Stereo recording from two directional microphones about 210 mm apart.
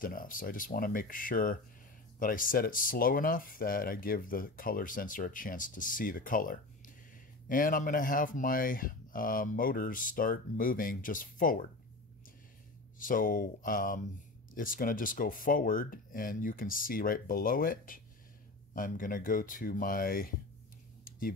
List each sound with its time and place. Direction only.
0.0 s speech: 40° left (ahead or behind)
13.0 s speech: 40° left (ahead or behind)